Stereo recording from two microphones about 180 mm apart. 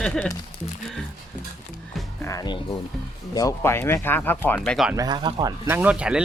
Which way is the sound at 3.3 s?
15° left (ahead or behind).